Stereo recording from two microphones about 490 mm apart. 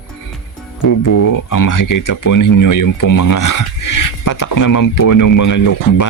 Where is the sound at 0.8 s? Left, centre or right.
Left.